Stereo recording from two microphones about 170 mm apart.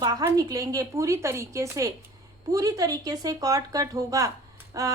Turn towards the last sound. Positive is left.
turn(degrees=-20)  # may be behind; listen again after turning